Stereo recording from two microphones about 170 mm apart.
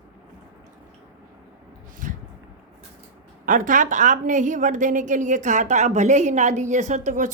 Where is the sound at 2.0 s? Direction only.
50° right (ahead or behind).